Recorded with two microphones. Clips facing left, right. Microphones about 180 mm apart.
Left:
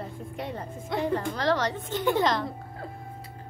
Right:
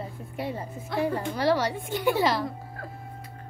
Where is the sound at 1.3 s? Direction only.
10° right (ahead or behind).